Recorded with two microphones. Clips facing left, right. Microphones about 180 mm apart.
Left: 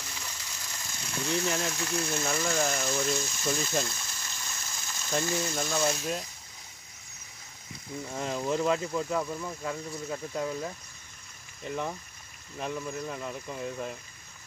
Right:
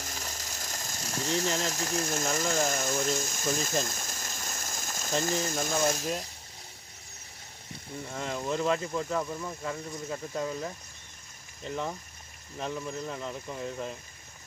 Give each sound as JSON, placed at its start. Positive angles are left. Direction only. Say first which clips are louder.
{"t": 0.0, "sound": "ratchet", "louder": "right 3 dB", "side_deg": -45}
{"t": 1.7, "sound": "speech", "louder": "even", "side_deg": -45}
{"t": 8.1, "sound": "speech", "louder": "left 2 dB", "side_deg": 15}
{"t": 13.1, "sound": "speech", "louder": "even", "side_deg": 5}